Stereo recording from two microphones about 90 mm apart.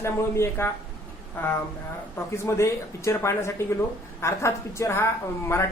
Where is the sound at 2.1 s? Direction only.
30° left (ahead or behind).